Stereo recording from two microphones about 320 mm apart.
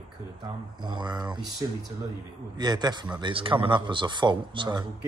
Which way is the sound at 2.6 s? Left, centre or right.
Centre.